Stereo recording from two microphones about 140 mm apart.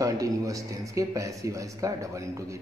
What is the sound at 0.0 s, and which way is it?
A man's voice, 25° right (ahead or behind).